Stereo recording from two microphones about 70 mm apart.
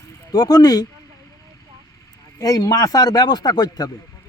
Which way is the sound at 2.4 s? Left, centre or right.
Left.